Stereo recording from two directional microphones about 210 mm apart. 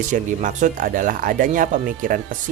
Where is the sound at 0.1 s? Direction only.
35° right (ahead or behind).